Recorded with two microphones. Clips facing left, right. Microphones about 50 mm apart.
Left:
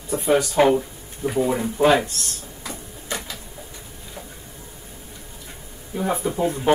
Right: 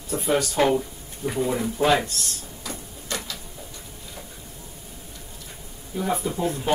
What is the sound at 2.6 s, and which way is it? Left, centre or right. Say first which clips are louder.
Printer: left 2 dB; centre.